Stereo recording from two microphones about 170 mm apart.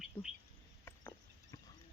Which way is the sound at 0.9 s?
15° left (ahead or behind).